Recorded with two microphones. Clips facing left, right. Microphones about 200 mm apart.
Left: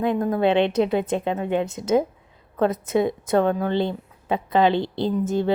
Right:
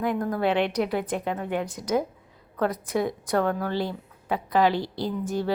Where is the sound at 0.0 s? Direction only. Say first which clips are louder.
Left 5 dB; 25° left (ahead or behind).